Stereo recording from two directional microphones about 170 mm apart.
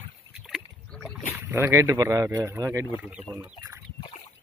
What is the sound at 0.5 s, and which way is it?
Rowboat, 5° left (ahead or behind).